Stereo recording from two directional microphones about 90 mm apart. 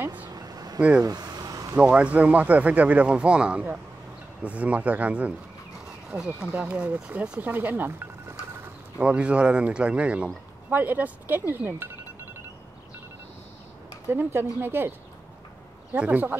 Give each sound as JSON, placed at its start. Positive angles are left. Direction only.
{"t": 0.0, "sound": "vehicle", "side_deg": -20}
{"t": 0.3, "sound": "vehicle", "side_deg": -45}
{"t": 0.7, "sound": "a man's voice", "side_deg": -15}
{"t": 1.0, "sound": "vehicle", "side_deg": -45}
{"t": 1.8, "sound": "a man's voice", "side_deg": -15}
{"t": 14.0, "sound": "a man's voice", "side_deg": -30}